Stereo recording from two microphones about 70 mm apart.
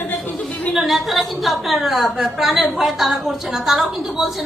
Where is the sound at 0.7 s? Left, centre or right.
Centre.